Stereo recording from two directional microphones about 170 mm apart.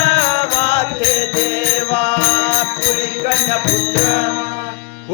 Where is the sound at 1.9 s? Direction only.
35° left (ahead or behind).